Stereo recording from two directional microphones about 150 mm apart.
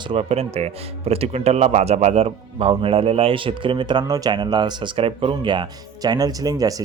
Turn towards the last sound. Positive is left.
turn(degrees=-25)  # may be behind; listen again after turning